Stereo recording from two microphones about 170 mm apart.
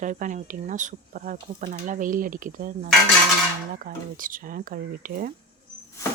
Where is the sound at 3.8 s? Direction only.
55° right (ahead or behind).